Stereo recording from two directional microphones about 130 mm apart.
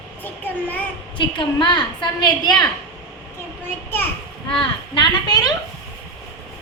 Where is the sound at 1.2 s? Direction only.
40° left (ahead or behind).